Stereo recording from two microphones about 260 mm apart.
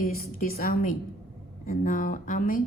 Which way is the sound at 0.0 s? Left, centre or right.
Left.